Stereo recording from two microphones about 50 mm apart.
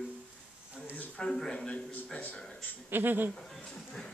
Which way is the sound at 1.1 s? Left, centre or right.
Centre.